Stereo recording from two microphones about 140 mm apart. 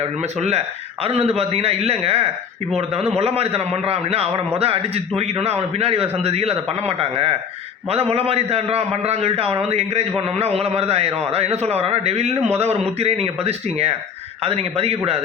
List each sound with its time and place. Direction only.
0.2 s a man's voice: 50° right (ahead or behind)